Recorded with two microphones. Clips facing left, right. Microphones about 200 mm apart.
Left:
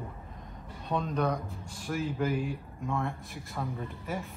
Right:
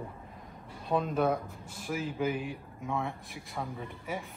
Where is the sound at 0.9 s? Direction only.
5° right (ahead or behind).